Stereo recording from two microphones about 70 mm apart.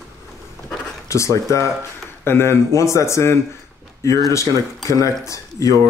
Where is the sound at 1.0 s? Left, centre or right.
Left.